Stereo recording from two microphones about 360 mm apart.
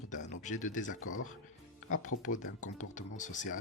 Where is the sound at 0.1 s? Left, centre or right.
Centre.